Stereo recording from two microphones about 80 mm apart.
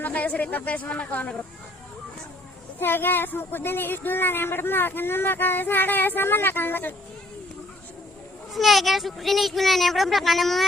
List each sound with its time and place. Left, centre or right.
0.0 s speech: centre
2.8 s speech: left
8.5 s speech: centre